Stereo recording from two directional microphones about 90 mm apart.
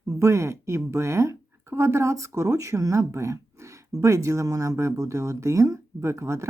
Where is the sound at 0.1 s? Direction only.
35° right (ahead or behind).